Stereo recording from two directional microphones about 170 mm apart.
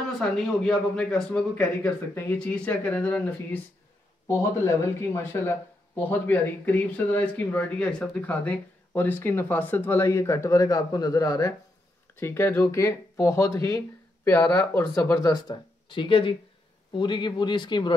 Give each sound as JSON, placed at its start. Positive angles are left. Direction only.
{"t": 0.2, "sound": "speech", "side_deg": 5}